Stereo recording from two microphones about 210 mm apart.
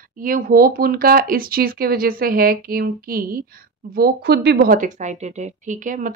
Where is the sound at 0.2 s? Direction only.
45° right (ahead or behind).